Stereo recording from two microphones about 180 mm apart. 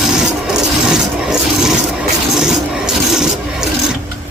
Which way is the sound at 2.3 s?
5° right (ahead or behind).